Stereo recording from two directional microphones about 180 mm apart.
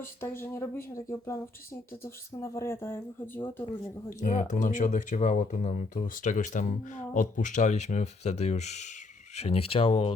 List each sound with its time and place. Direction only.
0.0 s speech: 15° left (ahead or behind)
4.1 s speech: 45° left (ahead or behind)